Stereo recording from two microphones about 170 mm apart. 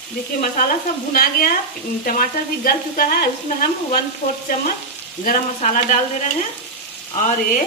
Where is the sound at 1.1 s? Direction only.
60° left (ahead or behind).